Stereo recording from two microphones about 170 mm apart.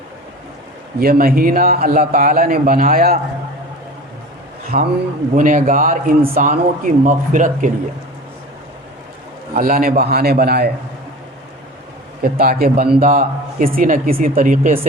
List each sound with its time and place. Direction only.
0.9 s a man's voice: 60° right (ahead or behind)
4.7 s a man's voice: 60° right (ahead or behind)
9.6 s a man's voice: 60° right (ahead or behind)
12.2 s a man's voice: 65° right (ahead or behind)